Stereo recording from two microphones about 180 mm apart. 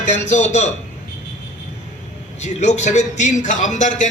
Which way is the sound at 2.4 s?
40° left (ahead or behind).